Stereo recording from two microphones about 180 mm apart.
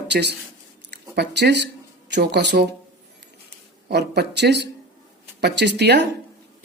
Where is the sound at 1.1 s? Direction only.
70° right (ahead or behind).